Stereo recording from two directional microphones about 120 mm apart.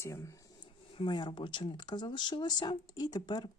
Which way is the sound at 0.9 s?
40° left (ahead or behind).